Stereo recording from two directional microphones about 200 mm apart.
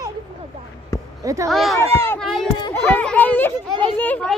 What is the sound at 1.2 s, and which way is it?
Speech, 15° right (ahead or behind).